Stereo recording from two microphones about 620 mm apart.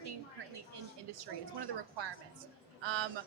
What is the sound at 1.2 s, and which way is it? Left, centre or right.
A woman's voice, right.